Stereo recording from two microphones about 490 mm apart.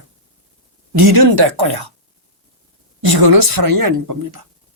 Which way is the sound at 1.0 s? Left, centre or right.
Right.